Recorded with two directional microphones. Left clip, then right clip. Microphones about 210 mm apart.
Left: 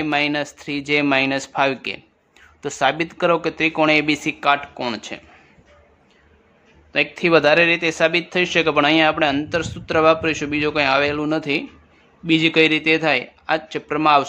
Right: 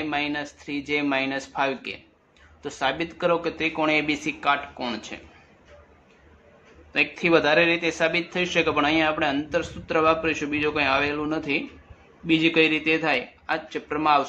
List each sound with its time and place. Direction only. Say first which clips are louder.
0.0 s speech: left 7 dB; 55° left (ahead or behind)
6.9 s speech: left 4 dB; 40° left (ahead or behind)